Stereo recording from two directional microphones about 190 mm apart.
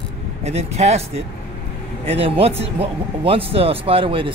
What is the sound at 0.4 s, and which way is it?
A man's voice, 35° right (ahead or behind).